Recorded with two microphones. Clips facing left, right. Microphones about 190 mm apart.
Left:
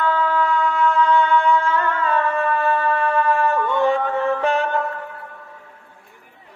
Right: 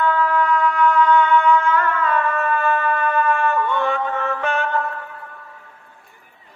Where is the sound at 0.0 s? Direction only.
25° left (ahead or behind).